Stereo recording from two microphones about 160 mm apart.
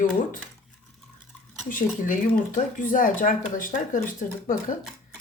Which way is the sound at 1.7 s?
55° left (ahead or behind).